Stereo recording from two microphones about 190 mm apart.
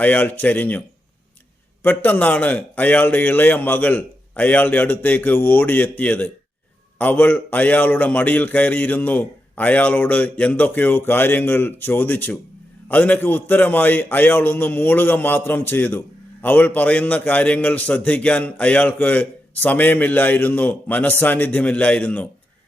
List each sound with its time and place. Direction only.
0.0 s a man's voice: 10° left (ahead or behind)
1.8 s a man's voice: 10° left (ahead or behind)